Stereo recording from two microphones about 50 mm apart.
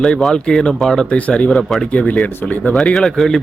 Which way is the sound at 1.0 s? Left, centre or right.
Left.